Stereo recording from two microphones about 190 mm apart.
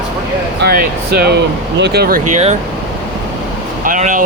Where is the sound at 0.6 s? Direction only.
55° right (ahead or behind).